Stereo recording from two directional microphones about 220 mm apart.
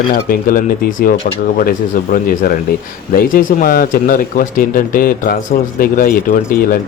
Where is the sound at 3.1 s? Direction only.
40° left (ahead or behind).